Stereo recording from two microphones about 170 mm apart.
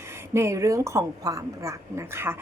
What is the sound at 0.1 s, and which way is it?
A woman's voice, 15° right (ahead or behind).